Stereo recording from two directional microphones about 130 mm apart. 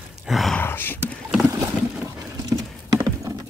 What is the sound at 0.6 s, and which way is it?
Roaring cats, 15° left (ahead or behind).